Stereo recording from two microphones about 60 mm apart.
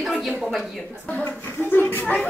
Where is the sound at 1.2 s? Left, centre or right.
Left.